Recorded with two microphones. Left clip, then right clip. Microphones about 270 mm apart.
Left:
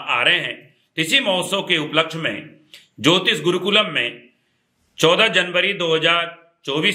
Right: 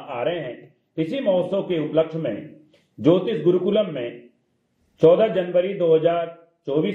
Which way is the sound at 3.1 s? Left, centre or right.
Left.